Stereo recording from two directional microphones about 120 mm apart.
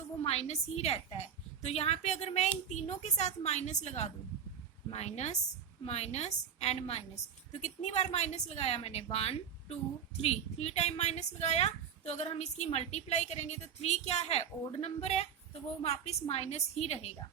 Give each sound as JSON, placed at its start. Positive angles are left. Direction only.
{"t": 0.2, "sound": "a woman's voice", "side_deg": 60}
{"t": 4.9, "sound": "a woman's voice", "side_deg": 65}
{"t": 7.6, "sound": "a woman's voice", "side_deg": 70}